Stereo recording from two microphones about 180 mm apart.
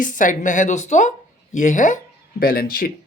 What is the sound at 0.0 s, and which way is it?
Speech, 45° left (ahead or behind).